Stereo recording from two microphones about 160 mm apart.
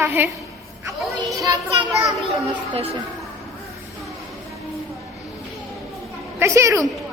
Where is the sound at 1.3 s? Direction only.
20° right (ahead or behind).